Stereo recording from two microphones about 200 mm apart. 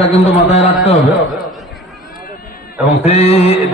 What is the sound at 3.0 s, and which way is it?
Speech, 30° left (ahead or behind).